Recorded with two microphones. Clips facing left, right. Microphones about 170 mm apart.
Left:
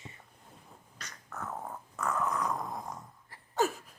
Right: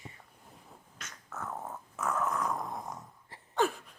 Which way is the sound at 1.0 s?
Centre (ahead or behind).